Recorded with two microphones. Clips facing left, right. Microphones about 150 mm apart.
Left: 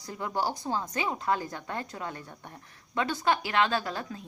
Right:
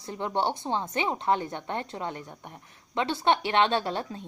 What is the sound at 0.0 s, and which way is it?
A woman's voice, 25° right (ahead or behind).